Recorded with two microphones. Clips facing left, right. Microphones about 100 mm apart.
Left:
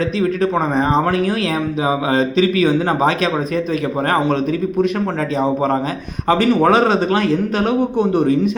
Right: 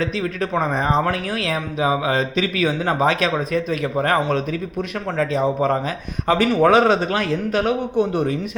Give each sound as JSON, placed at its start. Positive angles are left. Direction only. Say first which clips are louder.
{"t": 1.8, "sound": "speech", "louder": "left 2 dB", "side_deg": 25}
{"t": 6.2, "sound": "speech", "louder": "left 3 dB", "side_deg": 25}
{"t": 6.7, "sound": "a man's voice", "louder": "left 1 dB", "side_deg": -15}